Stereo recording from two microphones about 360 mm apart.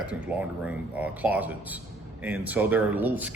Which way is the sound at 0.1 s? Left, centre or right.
Centre.